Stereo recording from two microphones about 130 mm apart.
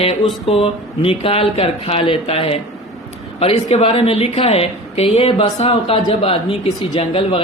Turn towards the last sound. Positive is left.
turn(degrees=45)  # may be behind; listen again after turning